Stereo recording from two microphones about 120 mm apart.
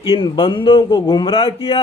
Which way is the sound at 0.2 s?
40° left (ahead or behind).